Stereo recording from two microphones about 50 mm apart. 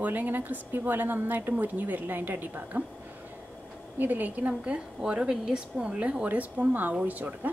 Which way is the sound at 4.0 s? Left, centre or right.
Right.